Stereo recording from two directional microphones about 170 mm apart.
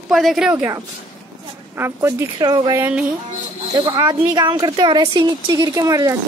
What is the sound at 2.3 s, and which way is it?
Speech, 25° right (ahead or behind).